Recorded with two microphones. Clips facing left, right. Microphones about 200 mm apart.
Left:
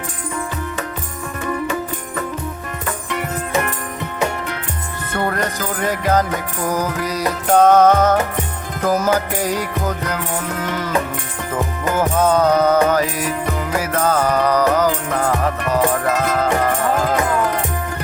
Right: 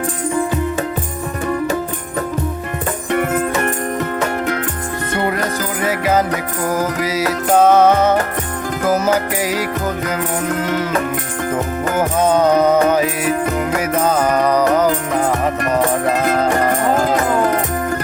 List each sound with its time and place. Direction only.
3.1 s music: 55° right (ahead or behind)
5.8 s music: 5° right (ahead or behind)
11.9 s music: 10° right (ahead or behind)
14.8 s music: 20° right (ahead or behind)